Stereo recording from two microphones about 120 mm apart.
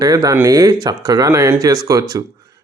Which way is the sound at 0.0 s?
30° right (ahead or behind).